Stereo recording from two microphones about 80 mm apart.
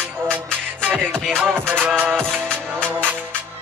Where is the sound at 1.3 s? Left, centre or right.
Right.